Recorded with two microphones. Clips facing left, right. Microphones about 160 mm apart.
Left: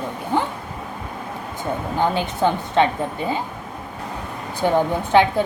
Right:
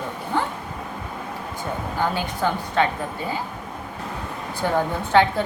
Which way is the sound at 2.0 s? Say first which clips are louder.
Left 4 dB; 20° left (ahead or behind).